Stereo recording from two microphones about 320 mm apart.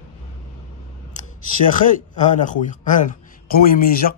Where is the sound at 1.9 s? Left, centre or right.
Left.